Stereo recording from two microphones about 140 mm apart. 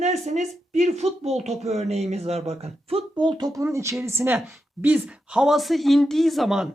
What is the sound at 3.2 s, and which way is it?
Speech, 30° right (ahead or behind).